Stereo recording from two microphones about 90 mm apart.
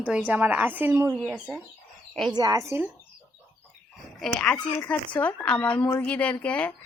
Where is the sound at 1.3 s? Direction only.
10° right (ahead or behind).